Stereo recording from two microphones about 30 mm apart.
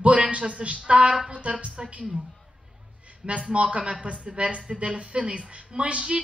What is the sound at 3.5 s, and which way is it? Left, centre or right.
Speech, right.